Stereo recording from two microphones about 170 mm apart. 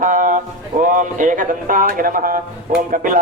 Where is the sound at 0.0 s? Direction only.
50° right (ahead or behind).